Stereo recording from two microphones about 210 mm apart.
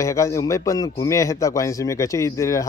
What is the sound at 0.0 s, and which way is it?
Speech, 15° left (ahead or behind).